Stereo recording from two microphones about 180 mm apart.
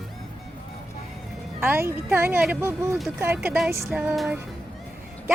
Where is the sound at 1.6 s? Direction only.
10° right (ahead or behind).